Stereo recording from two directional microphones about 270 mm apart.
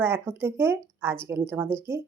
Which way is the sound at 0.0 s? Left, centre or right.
Centre.